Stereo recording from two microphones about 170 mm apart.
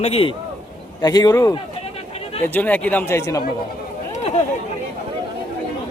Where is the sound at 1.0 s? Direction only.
25° left (ahead or behind).